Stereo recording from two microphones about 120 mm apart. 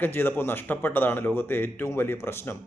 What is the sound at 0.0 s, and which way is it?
A man's voice, 15° left (ahead or behind).